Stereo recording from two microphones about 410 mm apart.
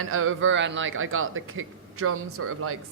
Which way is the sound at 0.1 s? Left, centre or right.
Right.